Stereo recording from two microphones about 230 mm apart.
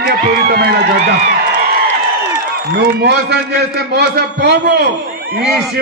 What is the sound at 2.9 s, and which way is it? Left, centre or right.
A man's voice, right.